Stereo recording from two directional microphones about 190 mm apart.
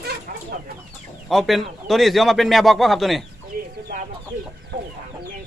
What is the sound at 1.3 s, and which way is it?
Speech, centre (ahead or behind).